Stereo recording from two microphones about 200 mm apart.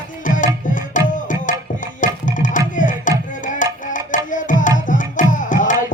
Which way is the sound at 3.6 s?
40° left (ahead or behind).